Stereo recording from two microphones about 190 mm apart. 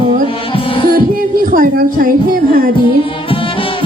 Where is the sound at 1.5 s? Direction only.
50° right (ahead or behind).